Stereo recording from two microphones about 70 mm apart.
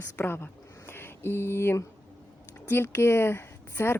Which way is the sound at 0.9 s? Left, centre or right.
Left.